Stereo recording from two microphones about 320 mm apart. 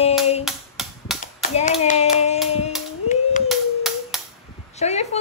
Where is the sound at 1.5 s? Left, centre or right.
Centre.